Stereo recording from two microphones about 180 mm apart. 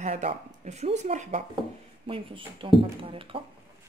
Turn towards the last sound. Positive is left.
turn(degrees=-30)  # may be behind; listen again after turning